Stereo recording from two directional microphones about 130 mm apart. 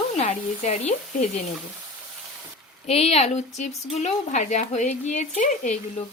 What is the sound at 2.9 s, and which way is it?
Speech, 50° left (ahead or behind).